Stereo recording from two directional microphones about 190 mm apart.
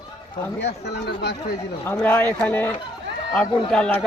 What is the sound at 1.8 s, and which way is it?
A man's voice, 10° left (ahead or behind).